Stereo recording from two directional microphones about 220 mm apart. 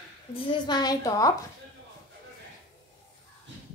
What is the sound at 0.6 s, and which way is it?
Speech, 20° left (ahead or behind).